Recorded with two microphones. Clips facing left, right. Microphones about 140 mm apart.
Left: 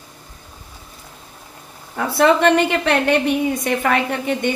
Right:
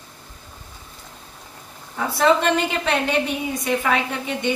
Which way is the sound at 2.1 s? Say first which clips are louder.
Left 4 dB; 60° left (ahead or behind).